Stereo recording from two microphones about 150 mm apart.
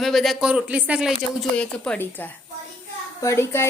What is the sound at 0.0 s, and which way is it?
Speech, centre (ahead or behind).